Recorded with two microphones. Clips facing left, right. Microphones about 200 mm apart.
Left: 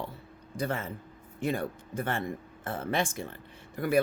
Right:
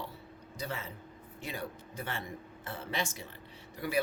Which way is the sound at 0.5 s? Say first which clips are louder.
Left 7 dB; 50° left (ahead or behind).